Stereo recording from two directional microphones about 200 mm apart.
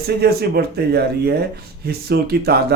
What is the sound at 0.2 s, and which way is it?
Speech, 50° right (ahead or behind).